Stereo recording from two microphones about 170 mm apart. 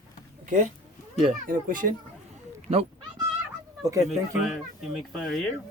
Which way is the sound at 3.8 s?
20° right (ahead or behind).